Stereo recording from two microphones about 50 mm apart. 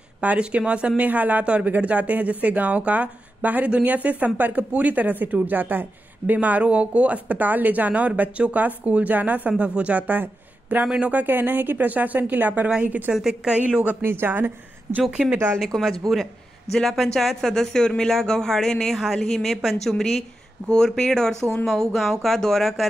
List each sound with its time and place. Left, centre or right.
0.2 s a woman's voice: right
13.1 s a woman's voice: centre
14.2 s a woman's voice: right
15.0 s a woman's voice: centre
15.3 s speech: right
15.8 s speech: centre